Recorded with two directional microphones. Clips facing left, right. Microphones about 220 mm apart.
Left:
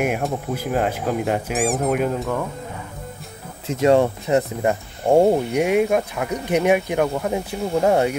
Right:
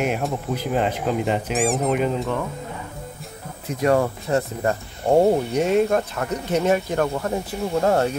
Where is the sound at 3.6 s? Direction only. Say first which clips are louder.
Left 3 dB; 25° left (ahead or behind).